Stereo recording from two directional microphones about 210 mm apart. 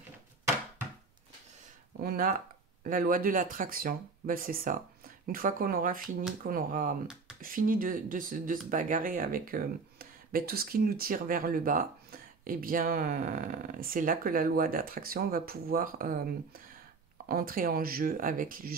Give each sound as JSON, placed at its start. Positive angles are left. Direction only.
{"t": 2.0, "sound": "speech", "side_deg": -45}